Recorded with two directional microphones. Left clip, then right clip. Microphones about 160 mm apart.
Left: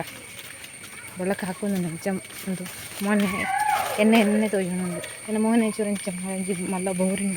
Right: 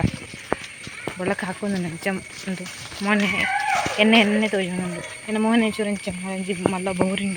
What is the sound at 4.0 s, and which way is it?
Speech, centre (ahead or behind).